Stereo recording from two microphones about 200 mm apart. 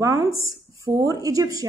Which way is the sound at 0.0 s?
15° right (ahead or behind).